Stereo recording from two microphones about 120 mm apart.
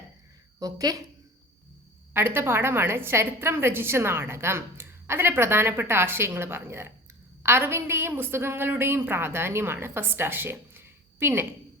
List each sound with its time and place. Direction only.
0.6 s a woman's voice: 30° right (ahead or behind)
2.1 s a woman's voice: 20° right (ahead or behind)